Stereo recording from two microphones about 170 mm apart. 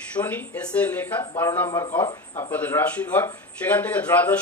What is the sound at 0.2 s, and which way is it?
A man's voice, 10° left (ahead or behind).